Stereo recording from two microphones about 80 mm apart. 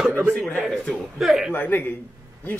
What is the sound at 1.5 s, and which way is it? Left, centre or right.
Speech, left.